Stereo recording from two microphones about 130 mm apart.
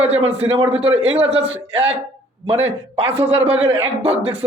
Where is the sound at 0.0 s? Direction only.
50° right (ahead or behind).